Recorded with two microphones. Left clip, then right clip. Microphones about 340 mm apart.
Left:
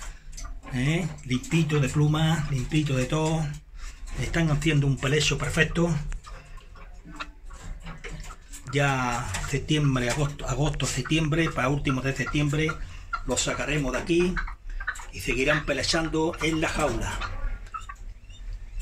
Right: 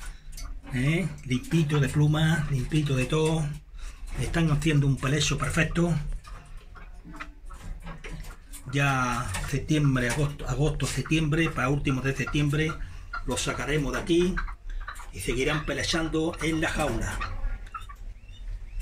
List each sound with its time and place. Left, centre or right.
0.7 s speech: centre
8.6 s speech: centre
15.2 s speech: centre